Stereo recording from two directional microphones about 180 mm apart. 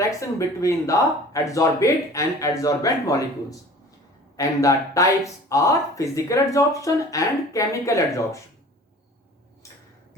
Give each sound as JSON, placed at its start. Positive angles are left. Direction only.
{"t": 0.1, "sound": "speech", "side_deg": 15}
{"t": 4.4, "sound": "speech", "side_deg": 20}